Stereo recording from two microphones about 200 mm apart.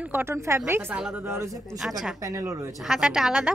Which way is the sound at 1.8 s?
Centre (ahead or behind).